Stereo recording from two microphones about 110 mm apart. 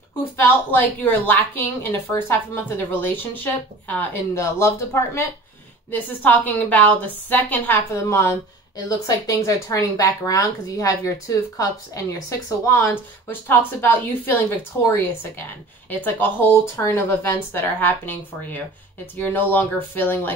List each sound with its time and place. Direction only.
0.7 s a woman's voice: 15° left (ahead or behind)